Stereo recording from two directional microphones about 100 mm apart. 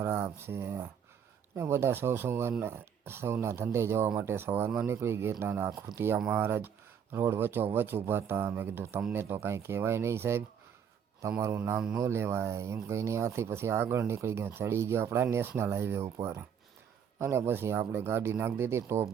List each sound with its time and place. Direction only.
0.0 s speech: 25° right (ahead or behind)